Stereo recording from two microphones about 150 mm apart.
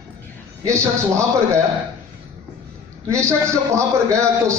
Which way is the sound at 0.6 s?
20° right (ahead or behind).